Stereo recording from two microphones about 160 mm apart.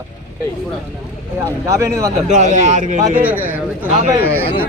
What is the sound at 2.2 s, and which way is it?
Speech, 50° right (ahead or behind).